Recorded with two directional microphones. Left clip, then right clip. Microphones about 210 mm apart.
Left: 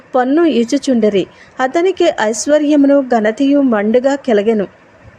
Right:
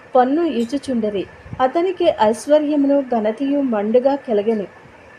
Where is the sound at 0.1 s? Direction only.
20° left (ahead or behind).